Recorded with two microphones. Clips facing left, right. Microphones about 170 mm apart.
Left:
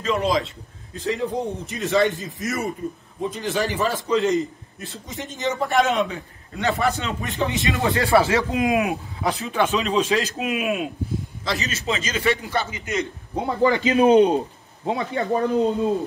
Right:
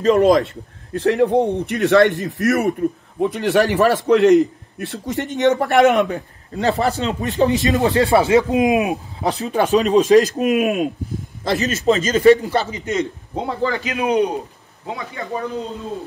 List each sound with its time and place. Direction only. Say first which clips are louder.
0.0 s a man's voice: right 9 dB; 45° right (ahead or behind)
0.9 s a man's voice: right 9 dB; 65° right (ahead or behind)
6.0 s a man's voice: right 7 dB; 40° right (ahead or behind)
8.1 s speech: right 2 dB; 20° right (ahead or behind)
9.2 s a man's voice: right 3 dB; 35° right (ahead or behind)
13.6 s a man's voice: left 6 dB; 15° left (ahead or behind)